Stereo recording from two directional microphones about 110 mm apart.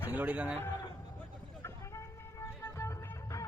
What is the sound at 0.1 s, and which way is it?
Speech, 15° right (ahead or behind).